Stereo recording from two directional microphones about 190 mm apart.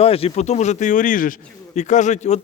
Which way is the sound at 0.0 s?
30° left (ahead or behind).